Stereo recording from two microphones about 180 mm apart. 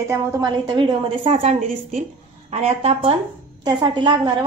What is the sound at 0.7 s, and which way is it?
A woman's voice, 30° right (ahead or behind).